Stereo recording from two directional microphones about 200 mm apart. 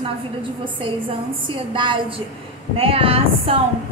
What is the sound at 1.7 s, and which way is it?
A woman's voice, 25° right (ahead or behind).